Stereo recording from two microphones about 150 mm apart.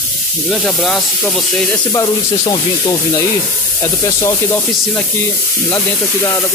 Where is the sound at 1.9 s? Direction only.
25° left (ahead or behind).